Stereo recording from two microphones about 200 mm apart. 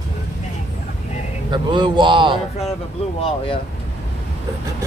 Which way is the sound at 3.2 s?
30° left (ahead or behind).